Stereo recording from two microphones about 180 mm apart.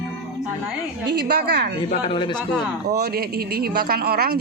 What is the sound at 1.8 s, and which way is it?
Speech, 30° left (ahead or behind).